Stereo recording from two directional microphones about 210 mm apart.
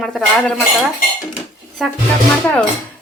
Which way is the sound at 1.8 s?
Centre (ahead or behind).